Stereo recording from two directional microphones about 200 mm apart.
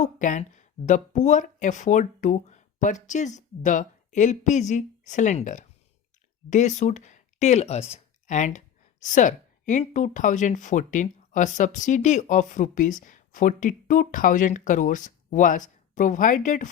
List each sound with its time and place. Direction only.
0.0 s speech: 40° left (ahead or behind)